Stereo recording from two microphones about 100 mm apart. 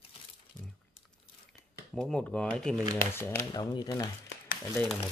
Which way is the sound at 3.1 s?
25° left (ahead or behind).